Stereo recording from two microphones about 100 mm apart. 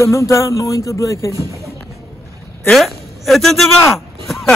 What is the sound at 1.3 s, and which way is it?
Speech, 35° right (ahead or behind).